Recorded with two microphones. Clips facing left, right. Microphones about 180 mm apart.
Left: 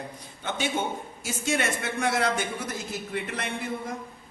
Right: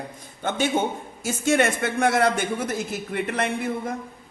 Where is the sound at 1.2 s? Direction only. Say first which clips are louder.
Right 7 dB; 50° right (ahead or behind).